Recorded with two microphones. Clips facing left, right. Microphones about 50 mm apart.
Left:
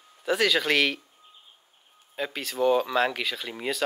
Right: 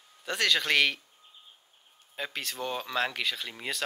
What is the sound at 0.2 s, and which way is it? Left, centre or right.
Speech, centre.